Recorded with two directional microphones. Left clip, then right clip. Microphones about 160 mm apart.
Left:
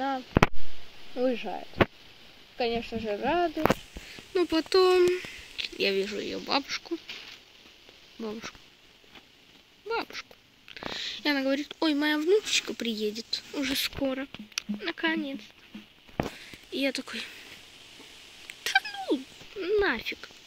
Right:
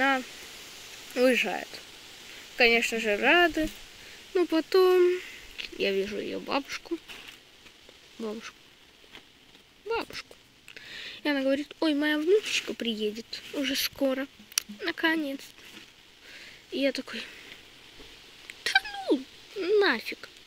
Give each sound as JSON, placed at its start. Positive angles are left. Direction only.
{"t": 1.1, "sound": "speech", "side_deg": -15}
{"t": 4.3, "sound": "speech", "side_deg": 0}
{"t": 8.2, "sound": "speech", "side_deg": 0}
{"t": 9.8, "sound": "speech", "side_deg": -5}
{"t": 14.0, "sound": "speech", "side_deg": -5}
{"t": 16.3, "sound": "speech", "side_deg": 0}
{"t": 18.6, "sound": "a sound", "side_deg": -10}